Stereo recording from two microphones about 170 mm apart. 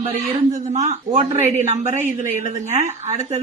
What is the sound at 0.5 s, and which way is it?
Speech, 40° right (ahead or behind).